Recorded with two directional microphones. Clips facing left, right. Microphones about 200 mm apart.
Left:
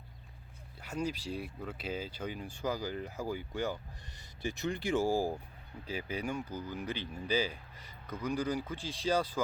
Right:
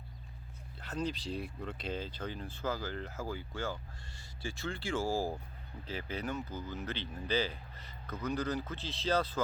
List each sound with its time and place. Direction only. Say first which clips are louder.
0.8 s speech: left 1 dB; 10° left (ahead or behind)